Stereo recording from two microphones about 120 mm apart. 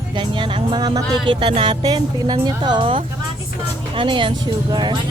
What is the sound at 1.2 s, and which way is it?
Speech, 45° right (ahead or behind).